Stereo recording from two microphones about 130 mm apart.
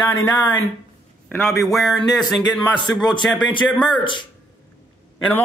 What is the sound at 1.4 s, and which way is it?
Speech, centre (ahead or behind).